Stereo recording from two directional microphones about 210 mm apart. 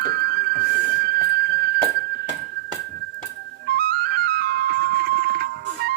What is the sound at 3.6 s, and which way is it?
Music, 45° right (ahead or behind).